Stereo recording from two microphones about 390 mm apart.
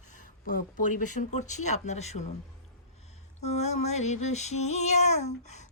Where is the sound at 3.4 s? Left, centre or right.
Centre.